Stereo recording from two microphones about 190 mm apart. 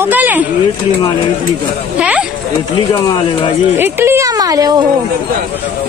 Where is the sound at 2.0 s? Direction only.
5° right (ahead or behind).